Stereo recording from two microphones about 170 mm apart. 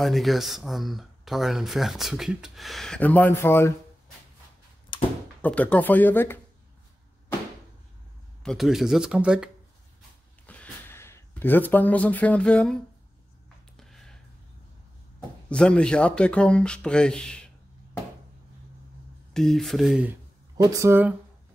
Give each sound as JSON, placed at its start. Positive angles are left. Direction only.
{"t": 0.0, "sound": "speech", "side_deg": 0}
{"t": 4.9, "sound": "door", "side_deg": 30}
{"t": 5.4, "sound": "speech", "side_deg": 10}
{"t": 8.4, "sound": "speech", "side_deg": 0}
{"t": 10.4, "sound": "a sound", "side_deg": 10}
{"t": 15.5, "sound": "speech", "side_deg": 5}
{"t": 19.3, "sound": "speech", "side_deg": 0}
{"t": 20.1, "sound": "speech", "side_deg": -20}